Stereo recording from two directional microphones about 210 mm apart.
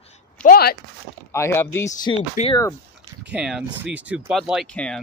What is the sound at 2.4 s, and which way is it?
Speech, 35° left (ahead or behind).